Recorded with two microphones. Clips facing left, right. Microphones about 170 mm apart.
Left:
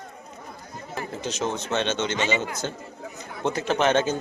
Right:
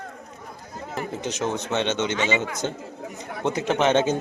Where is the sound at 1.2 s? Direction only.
15° right (ahead or behind).